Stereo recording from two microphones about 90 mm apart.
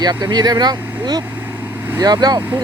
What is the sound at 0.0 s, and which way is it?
Speech, 50° right (ahead or behind).